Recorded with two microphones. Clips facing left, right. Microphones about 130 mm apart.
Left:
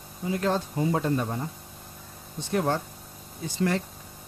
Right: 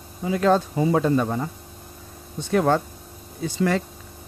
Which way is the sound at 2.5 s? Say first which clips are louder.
Right 6 dB; 90° right.